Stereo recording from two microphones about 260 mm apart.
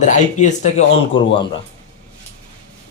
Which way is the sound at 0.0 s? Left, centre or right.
Left.